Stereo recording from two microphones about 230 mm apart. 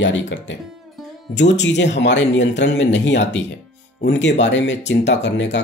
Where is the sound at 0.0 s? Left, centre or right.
Left.